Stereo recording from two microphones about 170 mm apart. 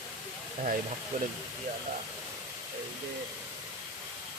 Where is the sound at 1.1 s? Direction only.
55° right (ahead or behind).